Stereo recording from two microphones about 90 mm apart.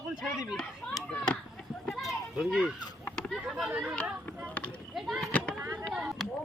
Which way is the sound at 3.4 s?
10° right (ahead or behind).